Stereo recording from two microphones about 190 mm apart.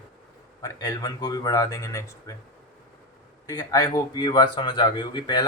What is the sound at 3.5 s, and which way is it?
Speech, 20° left (ahead or behind).